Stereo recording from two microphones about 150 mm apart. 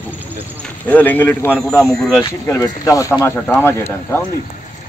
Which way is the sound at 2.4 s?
20° left (ahead or behind).